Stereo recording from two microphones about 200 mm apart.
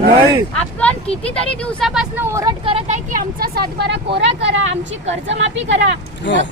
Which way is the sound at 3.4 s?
55° right (ahead or behind).